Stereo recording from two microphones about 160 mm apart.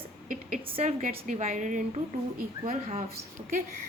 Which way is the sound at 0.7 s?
35° right (ahead or behind).